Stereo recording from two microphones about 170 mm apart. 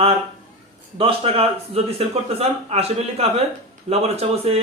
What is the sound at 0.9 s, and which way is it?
A man's voice, 35° right (ahead or behind).